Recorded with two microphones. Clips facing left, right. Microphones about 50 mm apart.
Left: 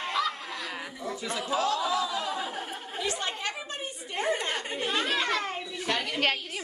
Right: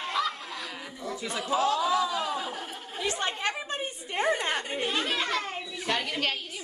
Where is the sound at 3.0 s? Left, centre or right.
Right.